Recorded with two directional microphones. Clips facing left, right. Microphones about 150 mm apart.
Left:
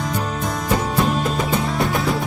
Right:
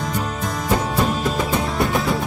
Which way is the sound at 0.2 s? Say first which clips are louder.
Left 1 dB; centre (ahead or behind).